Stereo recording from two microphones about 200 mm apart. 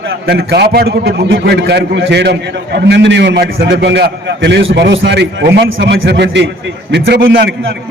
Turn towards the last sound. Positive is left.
turn(degrees=-55)  # may be behind; listen again after turning